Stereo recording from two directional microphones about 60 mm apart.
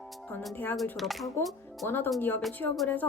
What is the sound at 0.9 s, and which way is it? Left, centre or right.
Chopping, centre.